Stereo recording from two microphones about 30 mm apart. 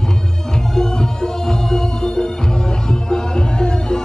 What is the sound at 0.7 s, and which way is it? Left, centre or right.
Music, centre.